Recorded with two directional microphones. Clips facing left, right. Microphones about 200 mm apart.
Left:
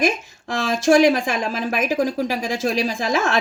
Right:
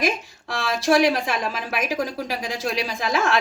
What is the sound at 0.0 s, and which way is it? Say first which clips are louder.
Speech: left 3 dB; 50° left (ahead or behind).